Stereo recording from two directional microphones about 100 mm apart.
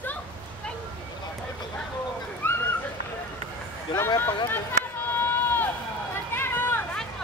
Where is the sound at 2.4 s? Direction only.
15° left (ahead or behind).